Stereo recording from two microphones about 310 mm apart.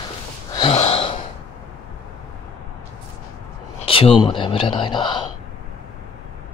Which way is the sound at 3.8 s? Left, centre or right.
Centre.